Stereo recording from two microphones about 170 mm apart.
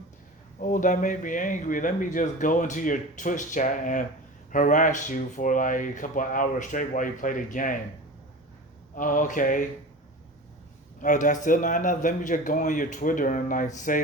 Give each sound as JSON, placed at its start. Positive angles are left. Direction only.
{"t": 0.6, "sound": "speech", "side_deg": 50}
{"t": 9.0, "sound": "speech", "side_deg": 50}
{"t": 11.0, "sound": "speech", "side_deg": 50}